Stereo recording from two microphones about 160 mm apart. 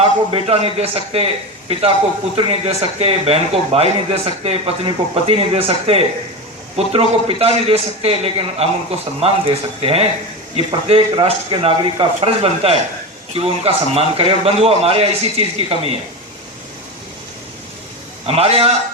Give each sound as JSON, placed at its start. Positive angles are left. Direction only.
{"t": 0.0, "sound": "a man's voice", "side_deg": -35}
{"t": 2.3, "sound": "a man's voice", "side_deg": -40}
{"t": 18.3, "sound": "a man's voice", "side_deg": -40}